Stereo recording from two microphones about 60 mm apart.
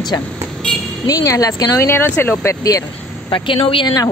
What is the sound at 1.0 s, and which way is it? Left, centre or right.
Speech, left.